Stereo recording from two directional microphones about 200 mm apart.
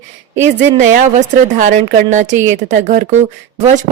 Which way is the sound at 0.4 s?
40° right (ahead or behind).